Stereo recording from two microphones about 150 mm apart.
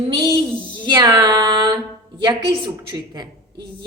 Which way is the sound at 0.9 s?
25° right (ahead or behind).